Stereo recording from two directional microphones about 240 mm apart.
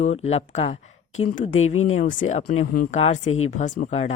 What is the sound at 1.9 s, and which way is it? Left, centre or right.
A woman's voice, left.